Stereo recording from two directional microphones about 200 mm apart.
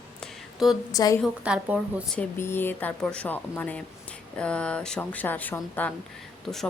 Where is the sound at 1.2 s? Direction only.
5° right (ahead or behind).